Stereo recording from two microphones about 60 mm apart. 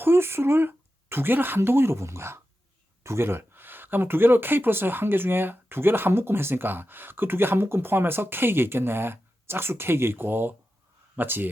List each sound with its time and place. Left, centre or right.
0.0 s speech: right